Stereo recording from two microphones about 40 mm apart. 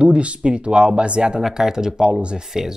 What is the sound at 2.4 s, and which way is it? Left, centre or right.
Speech, centre.